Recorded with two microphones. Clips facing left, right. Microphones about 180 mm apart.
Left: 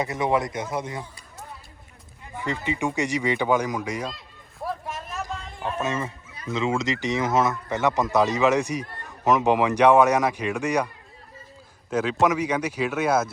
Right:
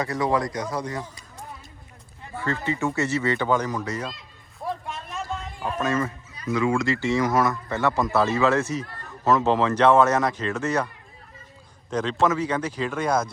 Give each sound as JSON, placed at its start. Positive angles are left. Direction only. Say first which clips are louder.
{"t": 0.0, "sound": "speech", "louder": "even", "side_deg": 20}
{"t": 2.3, "sound": "speech", "louder": "right 1 dB", "side_deg": 15}
{"t": 5.8, "sound": "speech", "louder": "right 5 dB", "side_deg": 25}
{"t": 11.9, "sound": "speech", "louder": "left 1 dB", "side_deg": 5}